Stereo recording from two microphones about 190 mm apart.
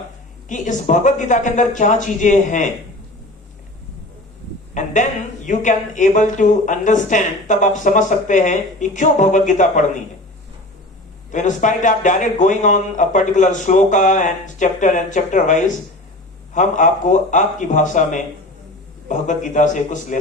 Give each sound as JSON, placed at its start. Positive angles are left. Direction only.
{"t": 0.4, "sound": "speech", "side_deg": 40}
{"t": 4.7, "sound": "speech", "side_deg": 40}
{"t": 11.3, "sound": "speech", "side_deg": 40}